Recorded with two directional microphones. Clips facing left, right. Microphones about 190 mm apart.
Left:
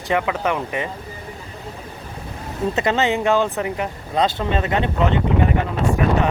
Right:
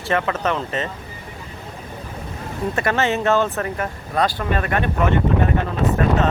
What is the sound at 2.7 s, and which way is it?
Speech, 20° left (ahead or behind).